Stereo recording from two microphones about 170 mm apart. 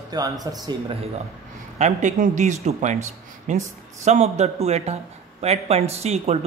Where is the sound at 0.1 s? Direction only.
25° right (ahead or behind).